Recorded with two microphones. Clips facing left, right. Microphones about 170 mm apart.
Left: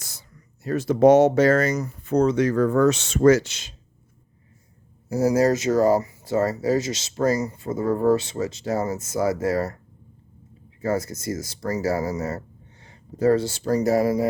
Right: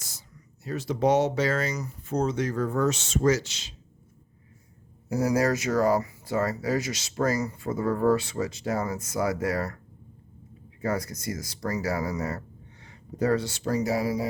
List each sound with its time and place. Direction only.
0.0 s speech: 60° left (ahead or behind)
5.0 s speech: 25° left (ahead or behind)
10.8 s speech: 25° left (ahead or behind)
12.8 s a sound: 30° left (ahead or behind)
13.7 s speech: 40° left (ahead or behind)